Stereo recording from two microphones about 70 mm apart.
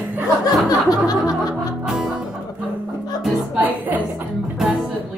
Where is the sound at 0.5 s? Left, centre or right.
Left.